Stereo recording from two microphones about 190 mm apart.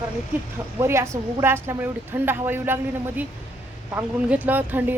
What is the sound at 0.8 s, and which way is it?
A woman's voice, 15° right (ahead or behind).